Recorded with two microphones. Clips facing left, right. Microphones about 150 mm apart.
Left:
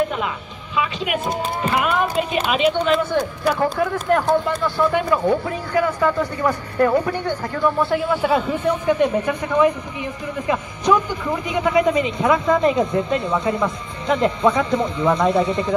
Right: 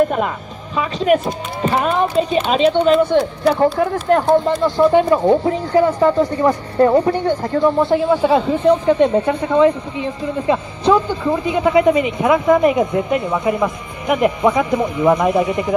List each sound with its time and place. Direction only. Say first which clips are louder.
0.7 s speech: right 7 dB; 40° right (ahead or behind)
4.6 s speech: right 5 dB; 15° right (ahead or behind)
4.8 s speech: right 6 dB; 30° right (ahead or behind)